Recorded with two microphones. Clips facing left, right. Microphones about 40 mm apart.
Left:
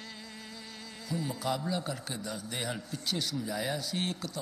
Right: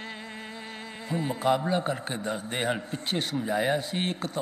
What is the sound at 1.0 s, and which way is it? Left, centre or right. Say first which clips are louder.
A man's voice: right 7 dB; right.